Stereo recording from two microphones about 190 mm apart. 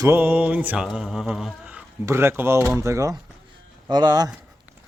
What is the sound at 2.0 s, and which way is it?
Speech, 15° right (ahead or behind).